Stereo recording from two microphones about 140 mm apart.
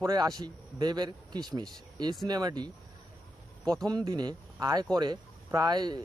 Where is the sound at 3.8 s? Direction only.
30° right (ahead or behind).